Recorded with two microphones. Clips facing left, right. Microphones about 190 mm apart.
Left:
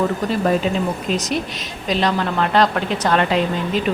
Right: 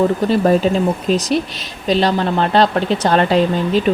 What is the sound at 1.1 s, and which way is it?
A woman's voice, 35° right (ahead or behind).